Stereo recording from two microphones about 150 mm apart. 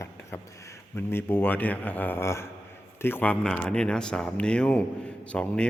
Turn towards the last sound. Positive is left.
turn(degrees=5)  # may be behind; listen again after turning